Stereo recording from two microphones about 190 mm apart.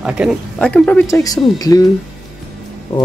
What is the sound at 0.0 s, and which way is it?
Speech, 5° right (ahead or behind).